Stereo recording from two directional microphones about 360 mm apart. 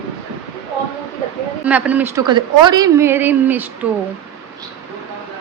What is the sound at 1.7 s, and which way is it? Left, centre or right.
A woman's voice, centre.